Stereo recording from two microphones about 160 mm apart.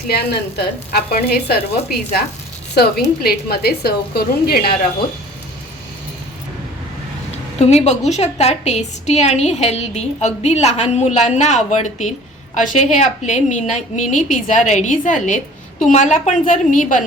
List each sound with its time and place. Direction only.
0.1 s speech: 85° left
1.5 s a woman's voice: 75° left (ahead or behind)
7.3 s a woman's voice: 45° left (ahead or behind)